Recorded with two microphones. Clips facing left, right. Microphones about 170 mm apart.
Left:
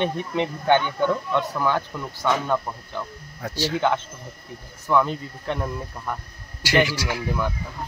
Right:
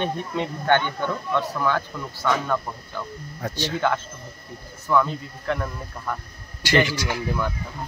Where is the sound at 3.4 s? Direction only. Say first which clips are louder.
Left 2 dB; 5° left (ahead or behind).